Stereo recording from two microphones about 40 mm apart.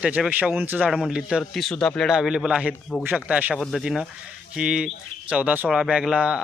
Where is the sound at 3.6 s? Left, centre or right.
Centre.